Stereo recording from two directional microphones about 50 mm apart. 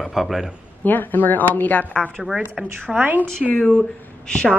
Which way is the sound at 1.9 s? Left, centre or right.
Centre.